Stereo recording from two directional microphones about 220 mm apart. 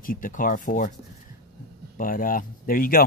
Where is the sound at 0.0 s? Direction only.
40° left (ahead or behind).